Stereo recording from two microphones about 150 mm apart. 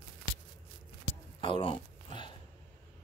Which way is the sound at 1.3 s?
35° left (ahead or behind).